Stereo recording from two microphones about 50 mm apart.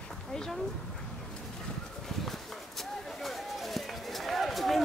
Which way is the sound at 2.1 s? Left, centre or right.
Centre.